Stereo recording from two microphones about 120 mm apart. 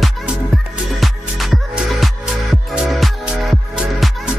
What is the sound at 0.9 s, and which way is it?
Music, centre (ahead or behind).